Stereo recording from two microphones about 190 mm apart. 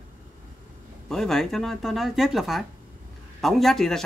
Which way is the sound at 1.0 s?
Centre (ahead or behind).